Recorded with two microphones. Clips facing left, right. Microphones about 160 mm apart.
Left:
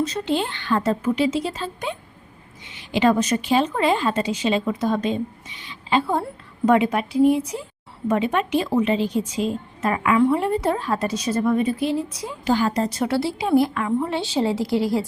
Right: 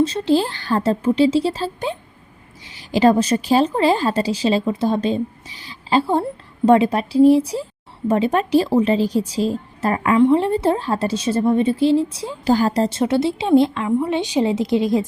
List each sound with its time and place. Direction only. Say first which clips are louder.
0.0 s a woman's voice: right 6 dB; 30° right (ahead or behind)